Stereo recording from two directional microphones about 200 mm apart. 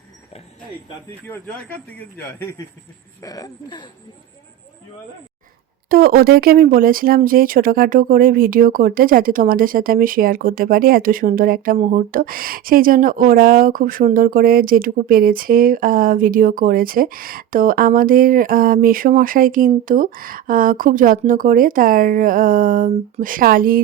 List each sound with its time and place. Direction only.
1.3 s speech: 10° left (ahead or behind)
5.9 s speech: 45° right (ahead or behind)